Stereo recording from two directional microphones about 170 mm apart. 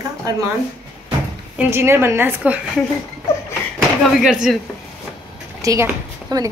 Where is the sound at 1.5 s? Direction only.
15° right (ahead or behind).